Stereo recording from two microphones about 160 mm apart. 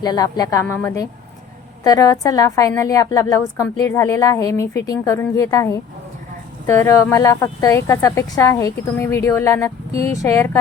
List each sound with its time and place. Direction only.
0.0 s a woman's voice: 25° left (ahead or behind)